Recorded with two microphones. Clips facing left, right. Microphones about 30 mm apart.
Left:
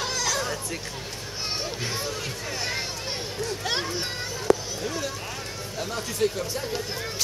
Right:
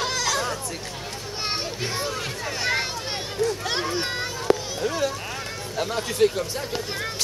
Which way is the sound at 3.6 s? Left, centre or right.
Centre.